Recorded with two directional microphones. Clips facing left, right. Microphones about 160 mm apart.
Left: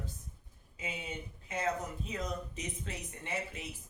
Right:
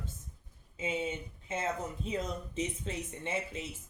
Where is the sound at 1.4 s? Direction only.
25° right (ahead or behind).